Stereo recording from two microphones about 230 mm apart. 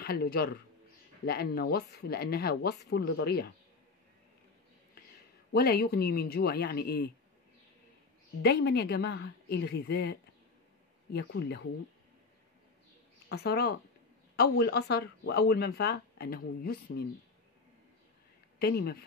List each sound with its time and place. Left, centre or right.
0.0 s a man's voice: left
5.5 s speech: left
8.4 s speech: left
13.3 s speech: left
18.6 s speech: left